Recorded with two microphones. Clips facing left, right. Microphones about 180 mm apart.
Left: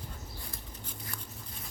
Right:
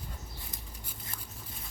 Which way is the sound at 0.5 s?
10° right (ahead or behind).